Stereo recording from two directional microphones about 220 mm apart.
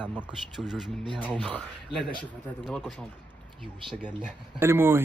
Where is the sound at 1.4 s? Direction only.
5° left (ahead or behind).